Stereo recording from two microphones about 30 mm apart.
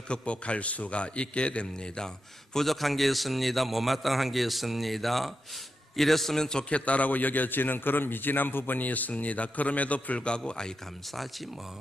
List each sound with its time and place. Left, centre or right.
0.1 s a man's voice: left
2.0 s speech: left
2.6 s a man's voice: centre
6.6 s a man's voice: left
10.2 s a man's voice: left
11.1 s a man's voice: centre